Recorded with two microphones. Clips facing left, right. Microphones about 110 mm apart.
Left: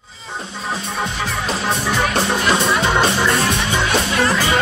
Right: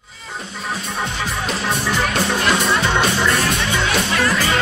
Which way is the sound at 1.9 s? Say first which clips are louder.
Left 2 dB; centre (ahead or behind).